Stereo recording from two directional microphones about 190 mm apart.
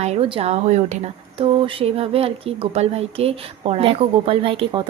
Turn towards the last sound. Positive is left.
turn(degrees=-30)  # may be behind; listen again after turning